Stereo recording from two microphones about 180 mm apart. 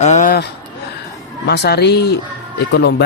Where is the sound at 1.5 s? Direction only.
65° left (ahead or behind).